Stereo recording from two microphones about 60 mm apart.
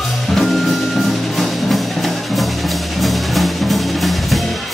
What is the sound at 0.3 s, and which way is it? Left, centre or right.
Music, centre.